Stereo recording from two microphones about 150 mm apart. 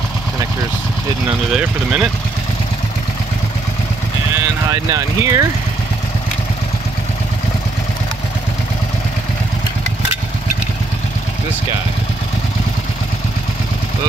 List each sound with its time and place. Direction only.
1.6 s speech: 10° right (ahead or behind)
4.9 s speech: 20° right (ahead or behind)